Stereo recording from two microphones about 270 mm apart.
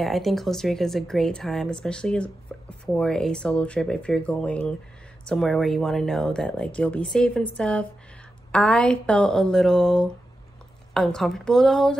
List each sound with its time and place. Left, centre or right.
0.0 s speech: centre